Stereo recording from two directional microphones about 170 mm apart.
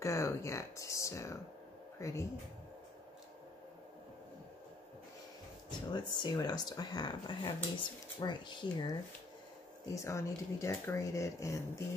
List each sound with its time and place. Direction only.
0.0 s a sound: 15° left (ahead or behind)
2.0 s speech: 15° left (ahead or behind)
5.9 s speech: 25° left (ahead or behind)
9.9 s speech: 15° left (ahead or behind)